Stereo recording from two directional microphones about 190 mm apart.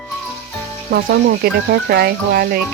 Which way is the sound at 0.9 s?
55° right (ahead or behind).